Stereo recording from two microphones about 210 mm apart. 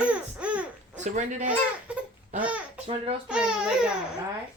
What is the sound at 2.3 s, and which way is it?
Speech, 5° right (ahead or behind).